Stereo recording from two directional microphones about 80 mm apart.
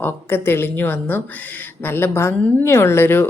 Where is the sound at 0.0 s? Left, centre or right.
Left.